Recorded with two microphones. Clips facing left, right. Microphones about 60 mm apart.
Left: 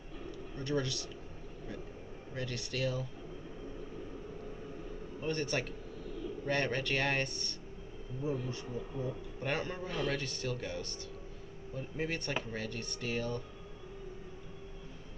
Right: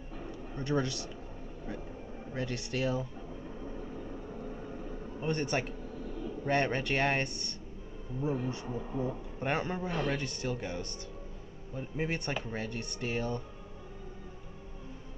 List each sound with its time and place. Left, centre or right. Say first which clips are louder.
0.6 s a man's voice: right 3 dB; right
2.3 s a man's voice: right 3 dB; right
5.2 s a man's voice: right 3 dB; right
6.0 s a sound: right 1 dB; right
6.4 s a man's voice: right 4 dB; right